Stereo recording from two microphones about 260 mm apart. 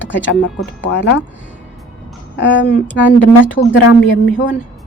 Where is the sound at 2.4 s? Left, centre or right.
Left.